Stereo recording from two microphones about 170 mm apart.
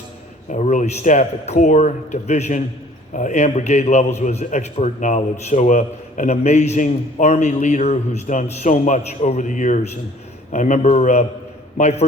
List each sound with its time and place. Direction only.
0.5 s a man's voice: 45° left (ahead or behind)